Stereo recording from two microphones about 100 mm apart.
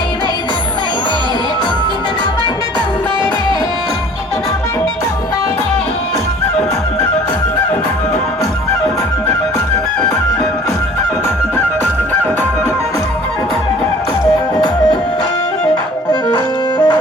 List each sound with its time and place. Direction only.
16.3 s music: 45° left (ahead or behind)